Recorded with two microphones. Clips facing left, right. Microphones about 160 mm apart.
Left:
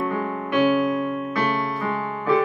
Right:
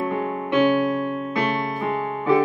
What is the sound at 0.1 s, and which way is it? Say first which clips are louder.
Music: right 1 dB; 20° right (ahead or behind).